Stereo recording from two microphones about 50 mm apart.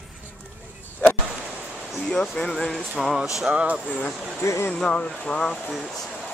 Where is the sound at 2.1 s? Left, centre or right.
Centre.